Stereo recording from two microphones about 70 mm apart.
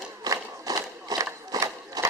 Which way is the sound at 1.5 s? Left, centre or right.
Right.